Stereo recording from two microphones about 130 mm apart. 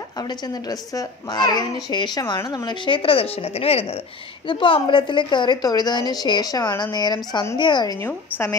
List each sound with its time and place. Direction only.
0.2 s a woman's voice: 30° left (ahead or behind); by 4.0 s 50° left (ahead or behind)
4.5 s a woman's voice: 40° left (ahead or behind)